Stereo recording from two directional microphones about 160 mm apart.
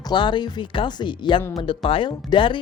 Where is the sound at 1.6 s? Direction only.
30° left (ahead or behind).